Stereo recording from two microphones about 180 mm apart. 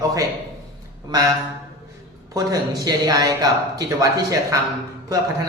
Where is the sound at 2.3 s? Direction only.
20° right (ahead or behind).